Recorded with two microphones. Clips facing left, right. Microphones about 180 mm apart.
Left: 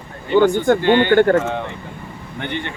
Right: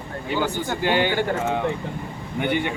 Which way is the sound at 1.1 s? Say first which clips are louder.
Left 11 dB; 60° left (ahead or behind).